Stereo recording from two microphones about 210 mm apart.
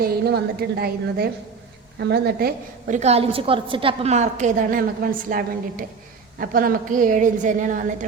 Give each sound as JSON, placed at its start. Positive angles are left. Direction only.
{"t": 0.0, "sound": "a woman's voice", "side_deg": -50}